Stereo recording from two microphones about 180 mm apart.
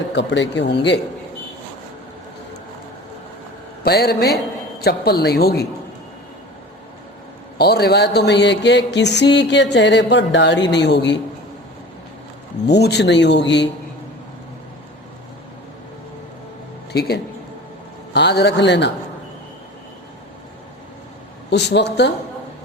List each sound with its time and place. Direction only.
0.1 s speech: 80° left
3.8 s a woman's voice: 60° left (ahead or behind)
7.6 s speech: 65° left (ahead or behind)
12.6 s speech: 70° left (ahead or behind)
16.9 s a woman's voice: 65° left (ahead or behind)
21.5 s speech: 70° left (ahead or behind)